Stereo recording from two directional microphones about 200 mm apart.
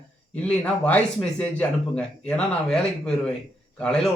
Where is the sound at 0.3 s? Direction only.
5° left (ahead or behind).